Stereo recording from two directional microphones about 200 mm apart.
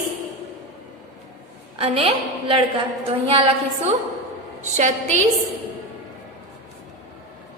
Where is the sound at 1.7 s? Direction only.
30° right (ahead or behind).